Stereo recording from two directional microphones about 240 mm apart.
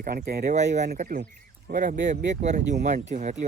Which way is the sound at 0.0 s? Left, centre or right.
Right.